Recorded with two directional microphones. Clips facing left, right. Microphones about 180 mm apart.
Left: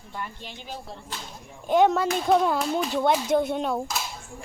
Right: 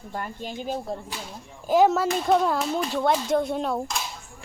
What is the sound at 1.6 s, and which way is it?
Speech, centre (ahead or behind).